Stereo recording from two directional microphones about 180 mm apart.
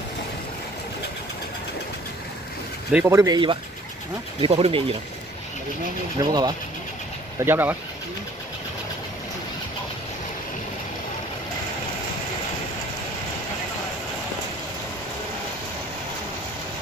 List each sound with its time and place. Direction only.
2.9 s speech: 10° right (ahead or behind); by 4.8 s 30° right (ahead or behind)
6.1 s speech: 20° right (ahead or behind)